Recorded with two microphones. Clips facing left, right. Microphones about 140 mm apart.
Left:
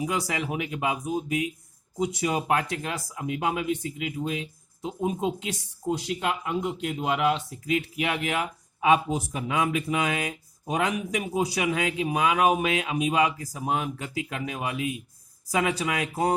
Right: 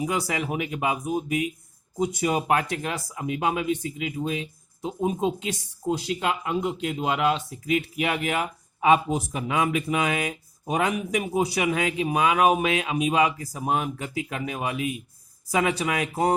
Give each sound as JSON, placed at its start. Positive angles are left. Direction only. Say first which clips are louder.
{"t": 0.0, "sound": "speech", "louder": "right 2 dB", "side_deg": -55}
{"t": 5.9, "sound": "speech", "louder": "right 2 dB", "side_deg": -80}
{"t": 13.6, "sound": "speech", "louder": "right 2 dB", "side_deg": -50}